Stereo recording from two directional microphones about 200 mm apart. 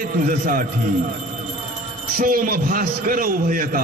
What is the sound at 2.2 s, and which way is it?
A man's voice, 45° right (ahead or behind).